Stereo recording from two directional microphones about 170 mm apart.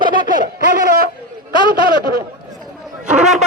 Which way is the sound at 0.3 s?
50° right (ahead or behind).